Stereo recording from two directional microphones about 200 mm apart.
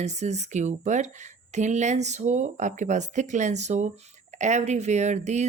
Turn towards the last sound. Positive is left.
turn(degrees=-35)  # may be behind; listen again after turning